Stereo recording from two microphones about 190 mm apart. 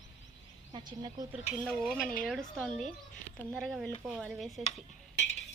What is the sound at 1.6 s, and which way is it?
A woman's voice, 5° left (ahead or behind).